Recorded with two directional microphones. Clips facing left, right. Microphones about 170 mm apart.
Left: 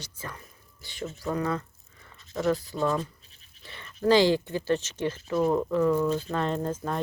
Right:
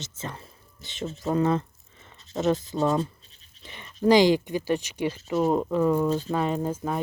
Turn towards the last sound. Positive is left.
turn(degrees=-10)  # may be behind; listen again after turning